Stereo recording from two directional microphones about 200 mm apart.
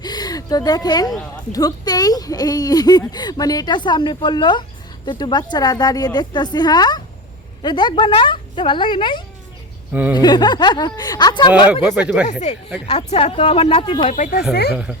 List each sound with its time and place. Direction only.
0.0 s a sound: 20° left (ahead or behind)
1.5 s speech: 20° left (ahead or behind)
9.9 s speech: 10° right (ahead or behind)
10.2 s speech: 20° left (ahead or behind)
11.7 s speech: 5° right (ahead or behind)
12.3 s a woman's voice: 35° left (ahead or behind)
14.2 s speech: 45° left (ahead or behind)